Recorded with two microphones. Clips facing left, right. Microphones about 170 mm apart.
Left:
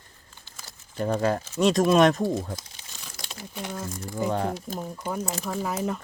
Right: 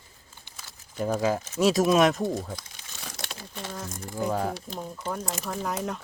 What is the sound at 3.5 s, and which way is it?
Speech, 15° left (ahead or behind).